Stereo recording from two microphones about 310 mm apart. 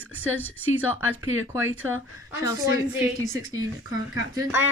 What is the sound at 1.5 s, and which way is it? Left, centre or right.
Speech, centre.